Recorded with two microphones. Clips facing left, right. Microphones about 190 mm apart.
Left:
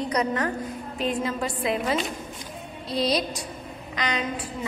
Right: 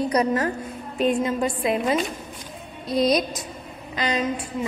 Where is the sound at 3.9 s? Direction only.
30° right (ahead or behind).